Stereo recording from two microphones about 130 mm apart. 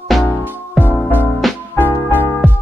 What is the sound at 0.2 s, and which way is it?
Music, 15° left (ahead or behind).